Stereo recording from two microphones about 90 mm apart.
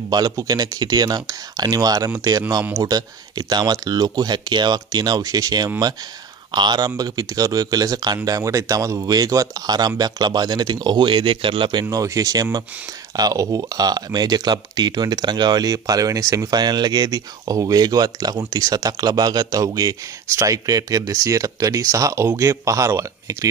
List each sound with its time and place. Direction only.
0.1 s speech: 45° right (ahead or behind); by 11.8 s 70° right (ahead or behind)
11.8 s speech: 40° right (ahead or behind)